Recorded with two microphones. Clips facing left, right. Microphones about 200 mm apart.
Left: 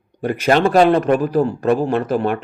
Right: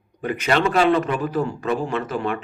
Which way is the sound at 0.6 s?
40° left (ahead or behind).